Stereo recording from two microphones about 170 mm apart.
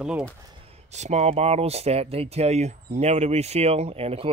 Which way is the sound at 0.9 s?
40° right (ahead or behind).